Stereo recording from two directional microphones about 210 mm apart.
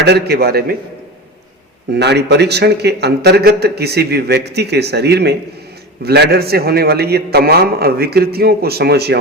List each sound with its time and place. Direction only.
0.0 s speech: 50° right (ahead or behind)
1.9 s speech: 50° right (ahead or behind)